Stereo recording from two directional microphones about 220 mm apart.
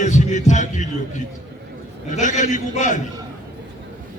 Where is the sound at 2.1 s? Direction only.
35° left (ahead or behind).